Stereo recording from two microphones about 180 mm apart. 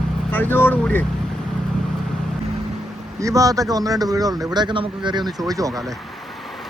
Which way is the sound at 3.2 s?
20° right (ahead or behind).